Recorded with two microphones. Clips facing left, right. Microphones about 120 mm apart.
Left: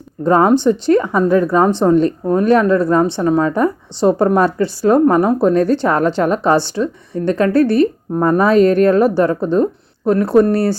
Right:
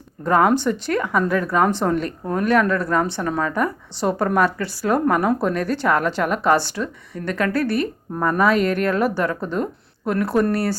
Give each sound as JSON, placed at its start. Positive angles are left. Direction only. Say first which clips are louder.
{"t": 0.3, "sound": "speech", "louder": "left 5 dB", "side_deg": 25}